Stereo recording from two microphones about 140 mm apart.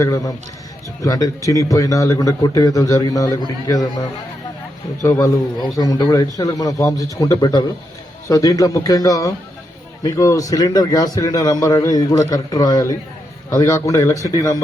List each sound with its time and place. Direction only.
0.0 s a man's voice: 25° left (ahead or behind)
5.0 s a man's voice: 25° left (ahead or behind)